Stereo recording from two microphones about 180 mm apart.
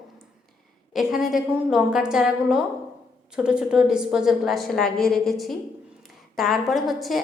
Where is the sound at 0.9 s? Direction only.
Centre (ahead or behind).